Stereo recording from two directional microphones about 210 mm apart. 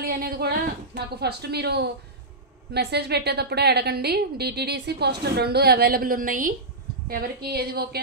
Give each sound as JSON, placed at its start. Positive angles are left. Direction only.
{"t": 0.0, "sound": "a woman's voice", "side_deg": -45}